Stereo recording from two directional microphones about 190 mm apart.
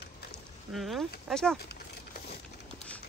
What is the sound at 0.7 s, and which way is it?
Speech, centre (ahead or behind).